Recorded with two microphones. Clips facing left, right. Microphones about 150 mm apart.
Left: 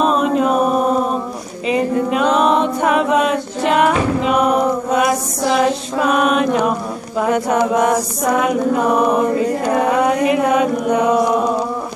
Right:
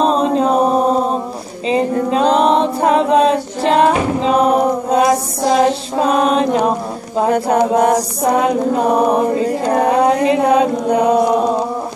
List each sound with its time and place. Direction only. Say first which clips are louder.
0.0 s chant: right 1 dB; 30° right (ahead or behind)
2.0 s a capella: right 3 dB; 30° right (ahead or behind)